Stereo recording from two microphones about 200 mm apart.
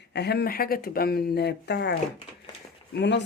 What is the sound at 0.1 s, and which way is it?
Speech, 55° left (ahead or behind).